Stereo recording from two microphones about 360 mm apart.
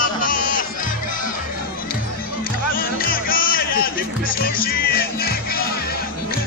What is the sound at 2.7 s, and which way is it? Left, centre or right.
Music, left.